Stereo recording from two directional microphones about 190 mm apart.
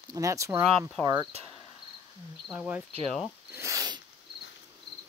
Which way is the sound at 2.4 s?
5° right (ahead or behind).